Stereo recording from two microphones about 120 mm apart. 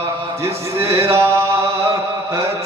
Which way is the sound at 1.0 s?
20° right (ahead or behind).